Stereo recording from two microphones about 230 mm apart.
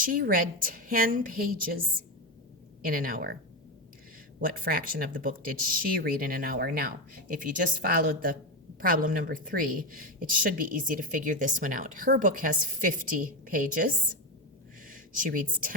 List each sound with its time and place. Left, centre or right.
0.0 s speech: right
2.8 s speech: right
4.4 s speech: right
14.8 s a sound: right